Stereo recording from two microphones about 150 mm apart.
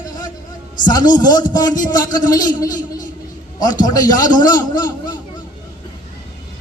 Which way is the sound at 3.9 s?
25° left (ahead or behind).